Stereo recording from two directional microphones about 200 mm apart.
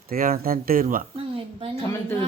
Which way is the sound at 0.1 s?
45° right (ahead or behind).